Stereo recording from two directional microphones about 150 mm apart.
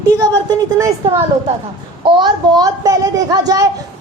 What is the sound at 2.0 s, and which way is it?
A child's voice, 30° right (ahead or behind).